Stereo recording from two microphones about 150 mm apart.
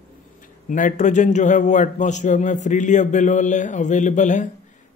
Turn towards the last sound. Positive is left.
turn(degrees=55)  # may be behind; listen again after turning